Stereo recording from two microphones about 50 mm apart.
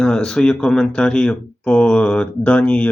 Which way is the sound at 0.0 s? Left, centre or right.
Centre.